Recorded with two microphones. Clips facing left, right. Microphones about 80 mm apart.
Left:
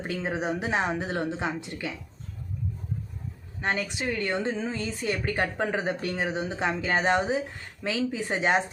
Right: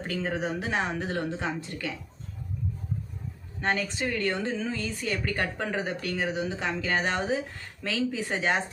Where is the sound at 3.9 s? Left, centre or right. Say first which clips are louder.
Even; centre.